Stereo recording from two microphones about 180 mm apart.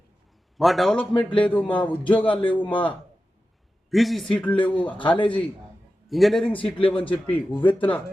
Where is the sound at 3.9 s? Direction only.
Centre (ahead or behind).